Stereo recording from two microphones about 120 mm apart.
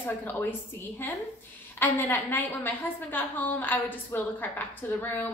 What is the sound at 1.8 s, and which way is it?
A woman's voice, 15° left (ahead or behind).